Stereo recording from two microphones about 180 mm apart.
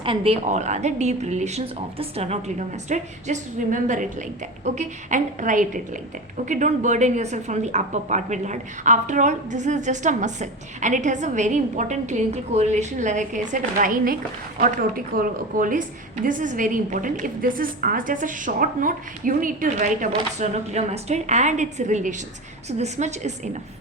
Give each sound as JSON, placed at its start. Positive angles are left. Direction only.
{"t": 0.0, "sound": "a woman's voice", "side_deg": -30}